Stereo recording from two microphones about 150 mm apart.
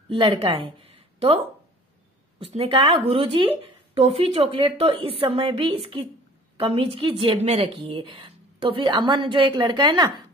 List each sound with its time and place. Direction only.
0.1 s a woman's voice: 35° right (ahead or behind)